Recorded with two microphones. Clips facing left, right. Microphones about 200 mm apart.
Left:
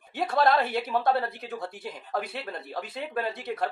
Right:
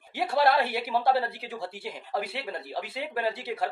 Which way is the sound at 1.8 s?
10° right (ahead or behind).